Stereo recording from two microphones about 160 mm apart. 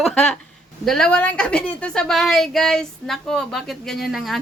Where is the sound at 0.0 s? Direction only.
5° left (ahead or behind).